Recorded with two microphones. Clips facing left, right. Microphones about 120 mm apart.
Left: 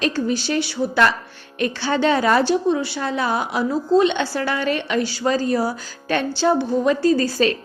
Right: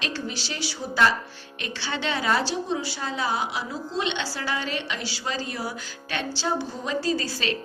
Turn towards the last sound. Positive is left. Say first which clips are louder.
# left 9 dB
turn(degrees=45)  # may be behind; listen again after turning